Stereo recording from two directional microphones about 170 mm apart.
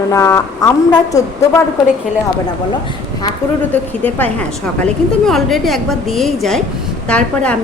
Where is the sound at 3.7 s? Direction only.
10° left (ahead or behind).